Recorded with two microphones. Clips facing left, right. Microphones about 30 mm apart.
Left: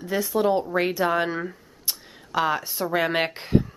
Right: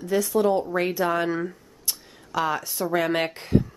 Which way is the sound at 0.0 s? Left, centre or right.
Centre.